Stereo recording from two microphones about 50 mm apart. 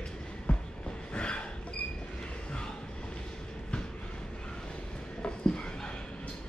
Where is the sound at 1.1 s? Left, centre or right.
Left.